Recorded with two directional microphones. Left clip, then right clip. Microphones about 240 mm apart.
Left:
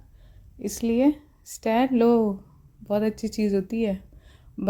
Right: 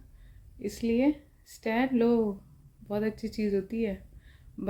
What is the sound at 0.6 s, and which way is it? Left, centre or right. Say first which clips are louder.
Speech: left 5 dB; left.